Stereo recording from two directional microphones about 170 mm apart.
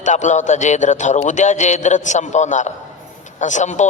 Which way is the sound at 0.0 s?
45° left (ahead or behind).